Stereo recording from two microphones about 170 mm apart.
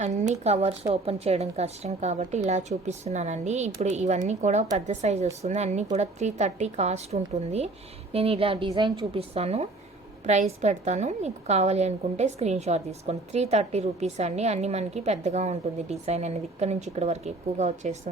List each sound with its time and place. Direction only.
0.0 s a woman's voice: 45° right (ahead or behind)